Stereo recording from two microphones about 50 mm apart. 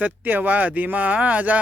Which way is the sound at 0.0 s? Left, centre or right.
Right.